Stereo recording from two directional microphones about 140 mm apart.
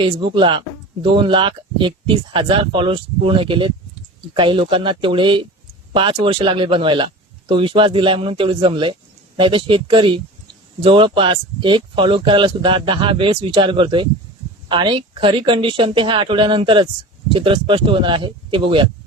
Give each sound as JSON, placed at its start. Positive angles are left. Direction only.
{"t": 0.0, "sound": "speech", "side_deg": -35}